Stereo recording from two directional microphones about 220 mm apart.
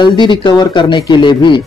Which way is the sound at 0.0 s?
20° left (ahead or behind).